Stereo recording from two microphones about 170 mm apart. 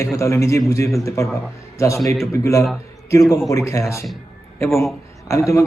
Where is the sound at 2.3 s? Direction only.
20° left (ahead or behind).